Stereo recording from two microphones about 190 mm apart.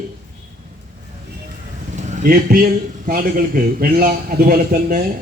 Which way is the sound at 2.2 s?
50° right (ahead or behind).